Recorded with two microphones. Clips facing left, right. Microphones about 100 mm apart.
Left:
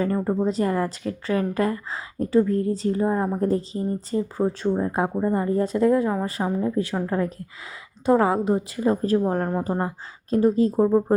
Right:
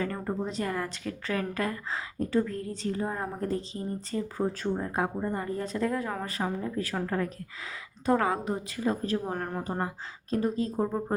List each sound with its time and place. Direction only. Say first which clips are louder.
0.0 s speech: left 9 dB; 30° left (ahead or behind)